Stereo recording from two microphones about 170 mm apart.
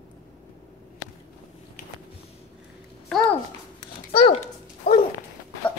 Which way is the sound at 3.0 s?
5° left (ahead or behind).